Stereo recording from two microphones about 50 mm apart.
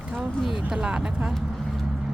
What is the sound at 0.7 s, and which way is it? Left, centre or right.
Speech, centre.